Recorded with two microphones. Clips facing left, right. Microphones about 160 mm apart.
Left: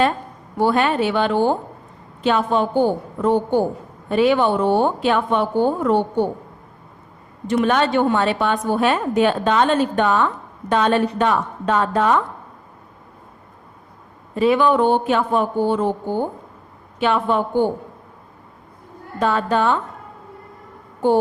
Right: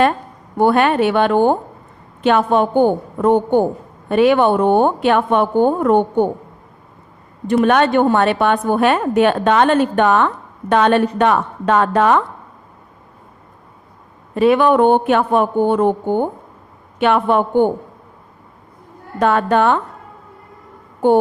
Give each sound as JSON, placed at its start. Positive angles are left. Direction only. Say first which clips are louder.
{"t": 0.5, "sound": "a woman's voice", "louder": "right 4 dB", "side_deg": -60}
{"t": 7.4, "sound": "a woman's voice", "louder": "right 4 dB", "side_deg": -55}
{"t": 14.3, "sound": "a woman's voice", "louder": "right 4 dB", "side_deg": -60}
{"t": 19.2, "sound": "a woman's voice", "louder": "right 4 dB", "side_deg": -60}